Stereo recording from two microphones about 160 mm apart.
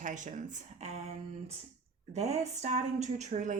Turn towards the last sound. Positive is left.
turn(degrees=-50)  # may be behind; listen again after turning